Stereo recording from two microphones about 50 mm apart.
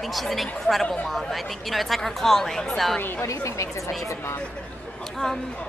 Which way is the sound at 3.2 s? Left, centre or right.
Left.